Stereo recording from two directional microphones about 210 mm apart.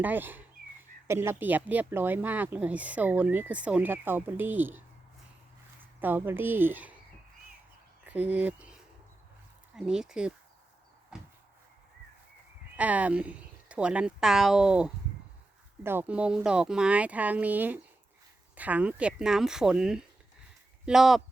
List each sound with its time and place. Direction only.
0.0 s speech: 10° right (ahead or behind)
6.0 s speech: 10° right (ahead or behind)
8.0 s speech: 10° right (ahead or behind)
11.1 s cupboard open or close: 5° right (ahead or behind)
12.7 s speech: 5° right (ahead or behind)